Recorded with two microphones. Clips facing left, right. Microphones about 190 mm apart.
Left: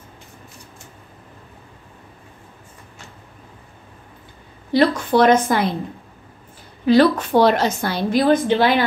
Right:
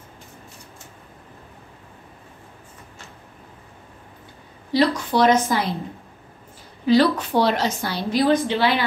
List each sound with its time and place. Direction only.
4.7 s a woman's voice: 55° left (ahead or behind)
6.9 s a woman's voice: 50° left (ahead or behind)